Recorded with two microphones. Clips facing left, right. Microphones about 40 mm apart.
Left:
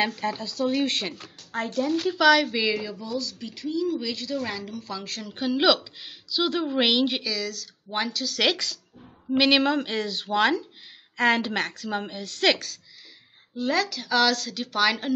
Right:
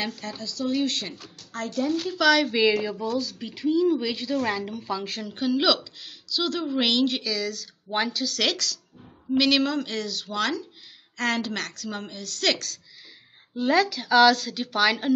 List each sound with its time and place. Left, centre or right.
0.0 s a woman's voice: left
2.1 s speech: centre
2.8 s a woman's voice: centre
5.3 s speech: centre
8.4 s a woman's voice: centre
13.6 s a woman's voice: centre